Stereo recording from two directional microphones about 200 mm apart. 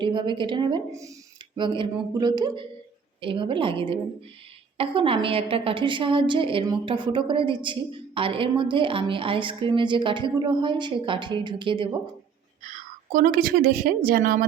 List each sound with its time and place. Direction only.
0.0 s a woman's voice: 25° right (ahead or behind)
12.6 s a woman's voice: 40° right (ahead or behind)